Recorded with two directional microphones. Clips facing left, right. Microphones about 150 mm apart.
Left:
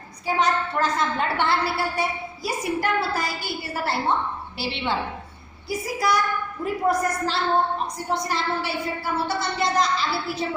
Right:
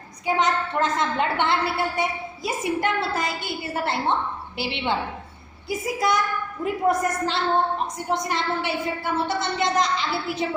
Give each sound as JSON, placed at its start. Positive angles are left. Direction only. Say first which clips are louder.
{"t": 0.3, "sound": "a woman's voice", "louder": "even", "side_deg": -20}